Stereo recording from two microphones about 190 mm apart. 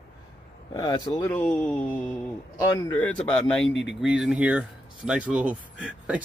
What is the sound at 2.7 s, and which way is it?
Speech, 15° left (ahead or behind).